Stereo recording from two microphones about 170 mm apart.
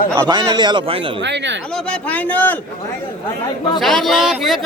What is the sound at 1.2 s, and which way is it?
Speech, 90° right.